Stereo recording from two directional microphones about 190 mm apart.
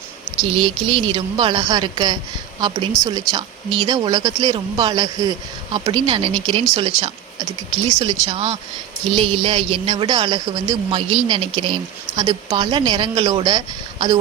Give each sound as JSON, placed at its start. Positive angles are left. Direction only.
{"t": 0.5, "sound": "speech", "side_deg": -25}
{"t": 7.9, "sound": "speech", "side_deg": -35}